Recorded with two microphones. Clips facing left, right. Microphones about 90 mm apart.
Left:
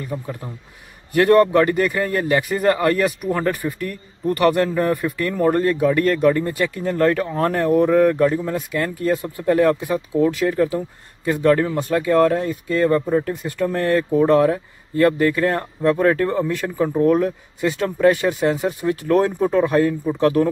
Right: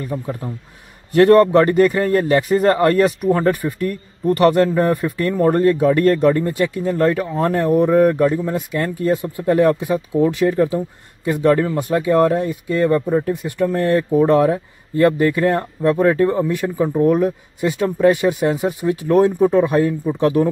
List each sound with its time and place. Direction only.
0.1 s a man's voice: 5° right (ahead or behind)
1.1 s a man's voice: 30° right (ahead or behind)